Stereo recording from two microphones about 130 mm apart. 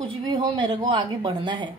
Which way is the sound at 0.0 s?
35° right (ahead or behind).